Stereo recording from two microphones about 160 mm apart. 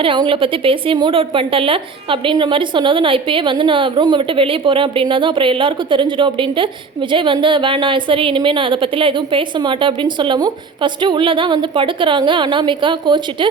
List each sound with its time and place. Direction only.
0.0 s a woman's voice: 30° right (ahead or behind)